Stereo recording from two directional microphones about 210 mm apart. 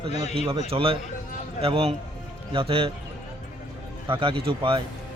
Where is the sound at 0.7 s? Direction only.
25° right (ahead or behind).